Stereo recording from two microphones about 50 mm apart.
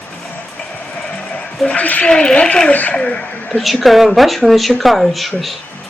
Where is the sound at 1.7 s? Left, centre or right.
Left.